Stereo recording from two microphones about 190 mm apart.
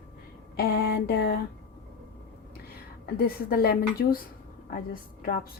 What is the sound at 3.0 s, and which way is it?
Speech, 55° left (ahead or behind).